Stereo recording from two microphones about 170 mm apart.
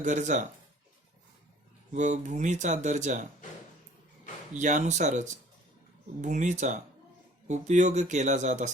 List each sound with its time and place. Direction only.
0.0 s speech: 45° right (ahead or behind)
1.9 s speech: 45° right (ahead or behind)
4.5 s speech: 45° right (ahead or behind)
6.2 s speech: 45° right (ahead or behind)